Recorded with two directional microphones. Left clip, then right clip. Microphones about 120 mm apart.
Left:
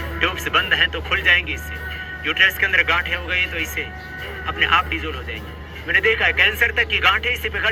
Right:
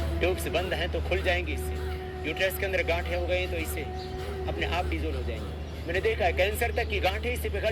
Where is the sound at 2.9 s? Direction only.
45° right (ahead or behind).